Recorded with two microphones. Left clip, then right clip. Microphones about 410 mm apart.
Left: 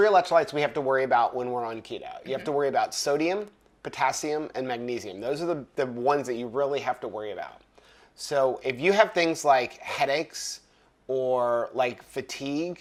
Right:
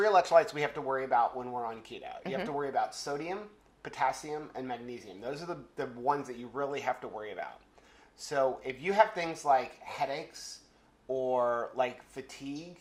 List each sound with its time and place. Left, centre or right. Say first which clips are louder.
0.0 s speech: left 4 dB; left
11.1 s speech: left 5 dB; left